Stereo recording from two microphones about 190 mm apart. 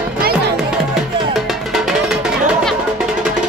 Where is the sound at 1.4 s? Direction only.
Centre (ahead or behind).